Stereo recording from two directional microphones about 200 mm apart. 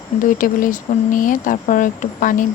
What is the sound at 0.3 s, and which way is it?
Speech, 45° left (ahead or behind).